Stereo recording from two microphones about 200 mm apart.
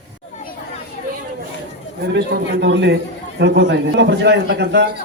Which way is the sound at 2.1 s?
60° right (ahead or behind).